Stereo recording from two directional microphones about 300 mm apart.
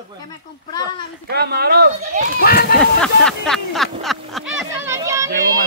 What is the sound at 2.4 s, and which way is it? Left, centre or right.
Speech, left.